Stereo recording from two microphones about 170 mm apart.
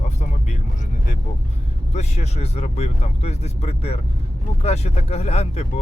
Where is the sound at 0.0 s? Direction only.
45° left (ahead or behind).